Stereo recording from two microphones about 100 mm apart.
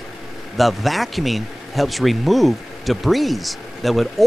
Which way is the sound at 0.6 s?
Centre (ahead or behind).